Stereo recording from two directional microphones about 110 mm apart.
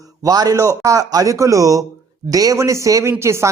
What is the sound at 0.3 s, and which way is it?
A man's voice, 35° right (ahead or behind).